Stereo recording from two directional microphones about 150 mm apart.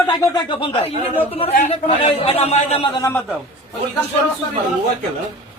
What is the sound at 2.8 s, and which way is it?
Speech, 30° left (ahead or behind).